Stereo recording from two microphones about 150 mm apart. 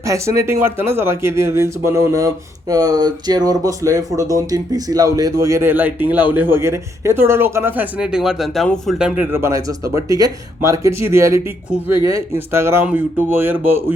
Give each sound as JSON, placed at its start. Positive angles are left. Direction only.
{"t": 0.0, "sound": "speech", "side_deg": -20}
{"t": 9.0, "sound": "speech", "side_deg": -10}